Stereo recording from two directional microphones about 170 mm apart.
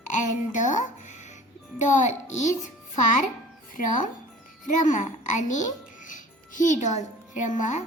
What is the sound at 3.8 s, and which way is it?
A child's voice, 50° left (ahead or behind).